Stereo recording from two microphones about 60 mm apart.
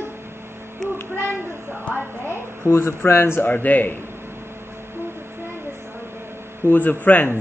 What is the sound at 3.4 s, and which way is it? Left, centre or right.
Speech, left.